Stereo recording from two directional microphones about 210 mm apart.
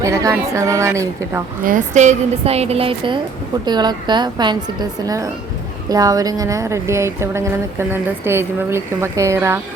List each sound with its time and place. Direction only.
0.0 s speech: 15° right (ahead or behind)
1.6 s a woman's voice: 35° right (ahead or behind); by 9.6 s 15° right (ahead or behind)